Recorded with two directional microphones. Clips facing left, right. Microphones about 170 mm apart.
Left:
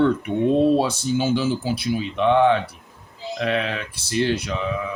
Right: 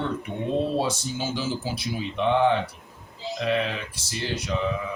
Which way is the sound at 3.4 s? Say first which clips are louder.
Left 2 dB; 65° left (ahead or behind).